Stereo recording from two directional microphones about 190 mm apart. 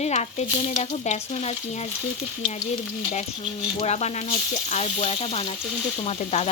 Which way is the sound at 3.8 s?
35° left (ahead or behind).